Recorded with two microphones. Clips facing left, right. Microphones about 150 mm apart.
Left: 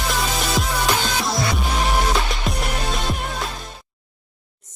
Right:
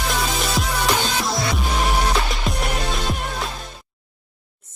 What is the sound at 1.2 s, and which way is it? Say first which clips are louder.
Music: even; centre (ahead or behind).